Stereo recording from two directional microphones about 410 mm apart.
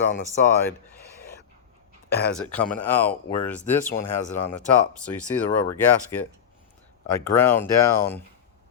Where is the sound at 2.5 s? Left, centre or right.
Centre.